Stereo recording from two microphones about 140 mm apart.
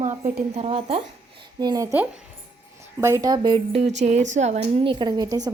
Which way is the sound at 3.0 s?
20° right (ahead or behind).